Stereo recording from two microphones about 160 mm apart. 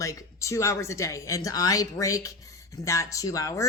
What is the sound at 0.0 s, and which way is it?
Speech, 20° left (ahead or behind).